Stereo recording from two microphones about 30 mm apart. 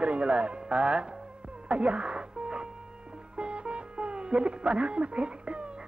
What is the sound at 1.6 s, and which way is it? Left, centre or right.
Music, right.